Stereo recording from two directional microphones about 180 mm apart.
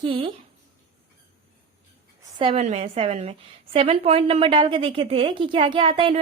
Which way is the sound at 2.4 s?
35° right (ahead or behind).